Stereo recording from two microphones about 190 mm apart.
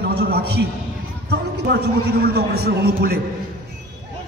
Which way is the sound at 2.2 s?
55° right (ahead or behind).